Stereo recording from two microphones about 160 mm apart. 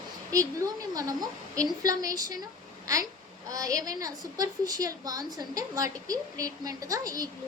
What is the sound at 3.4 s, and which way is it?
A woman's voice, 20° right (ahead or behind).